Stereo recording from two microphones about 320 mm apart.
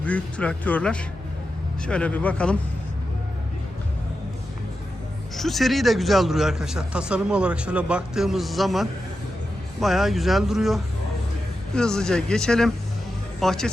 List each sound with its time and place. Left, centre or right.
0.0 s speech: centre
5.4 s speech: centre